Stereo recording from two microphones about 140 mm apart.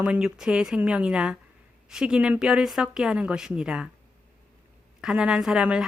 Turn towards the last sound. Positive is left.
turn(degrees=-5)  # may be behind; listen again after turning